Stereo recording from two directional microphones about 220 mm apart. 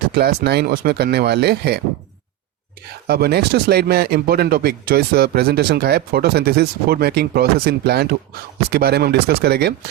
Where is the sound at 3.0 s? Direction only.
45° right (ahead or behind).